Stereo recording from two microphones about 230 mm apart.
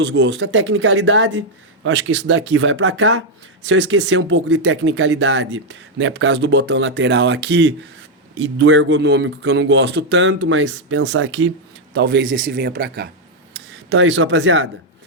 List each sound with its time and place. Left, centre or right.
0.0 s speech: right
11.9 s speech: right